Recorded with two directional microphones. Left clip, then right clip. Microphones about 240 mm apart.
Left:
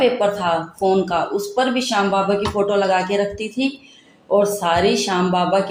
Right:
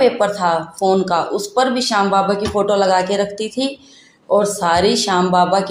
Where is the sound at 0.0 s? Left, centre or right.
Right.